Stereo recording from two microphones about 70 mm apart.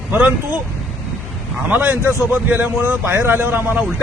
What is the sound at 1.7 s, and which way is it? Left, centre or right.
Speech, right.